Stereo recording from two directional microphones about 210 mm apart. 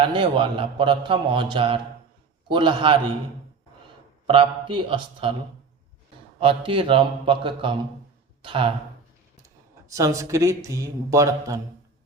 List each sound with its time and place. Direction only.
0.0 s a man's voice: 25° right (ahead or behind)
4.3 s a man's voice: 25° right (ahead or behind)
6.4 s a man's voice: 25° right (ahead or behind)
9.9 s a man's voice: 15° right (ahead or behind)